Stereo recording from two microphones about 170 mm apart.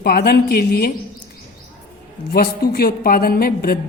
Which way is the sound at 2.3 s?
65° left (ahead or behind).